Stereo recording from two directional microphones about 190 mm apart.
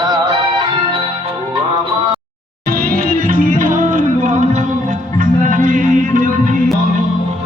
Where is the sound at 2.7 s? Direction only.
50° right (ahead or behind).